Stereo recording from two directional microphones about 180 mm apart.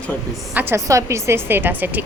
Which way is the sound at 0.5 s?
15° right (ahead or behind).